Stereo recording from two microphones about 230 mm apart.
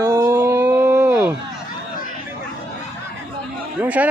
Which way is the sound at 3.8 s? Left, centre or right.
Centre.